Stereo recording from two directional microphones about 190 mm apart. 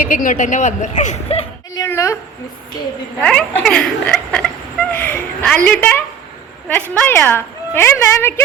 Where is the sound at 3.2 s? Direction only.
5° left (ahead or behind).